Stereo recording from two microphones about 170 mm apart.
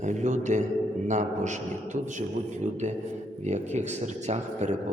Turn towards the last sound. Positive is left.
turn(degrees=-40)  # may be behind; listen again after turning